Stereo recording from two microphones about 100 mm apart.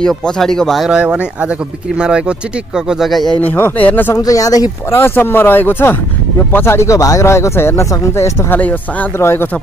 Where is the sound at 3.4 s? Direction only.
20° left (ahead or behind).